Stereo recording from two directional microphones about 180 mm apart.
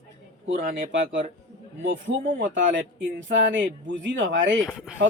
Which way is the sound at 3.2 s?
90° right.